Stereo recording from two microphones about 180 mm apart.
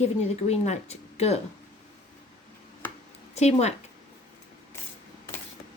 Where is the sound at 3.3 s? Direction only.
35° left (ahead or behind).